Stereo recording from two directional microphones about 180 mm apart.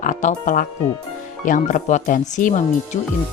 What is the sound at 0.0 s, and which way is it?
Speech, 45° left (ahead or behind).